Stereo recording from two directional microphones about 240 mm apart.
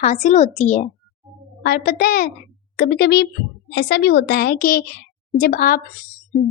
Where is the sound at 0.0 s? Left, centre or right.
Left.